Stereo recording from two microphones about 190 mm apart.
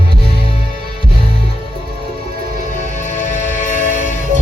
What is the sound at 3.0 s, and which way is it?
Music, 40° left (ahead or behind).